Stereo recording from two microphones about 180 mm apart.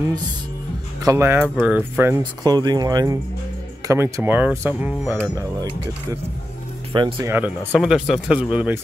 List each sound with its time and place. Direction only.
1.0 s speech: 15° right (ahead or behind)
6.9 s speech: 25° right (ahead or behind)
7.2 s speech: 10° right (ahead or behind)